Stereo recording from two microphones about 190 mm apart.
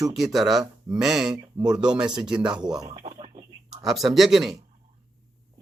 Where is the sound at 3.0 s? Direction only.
30° right (ahead or behind).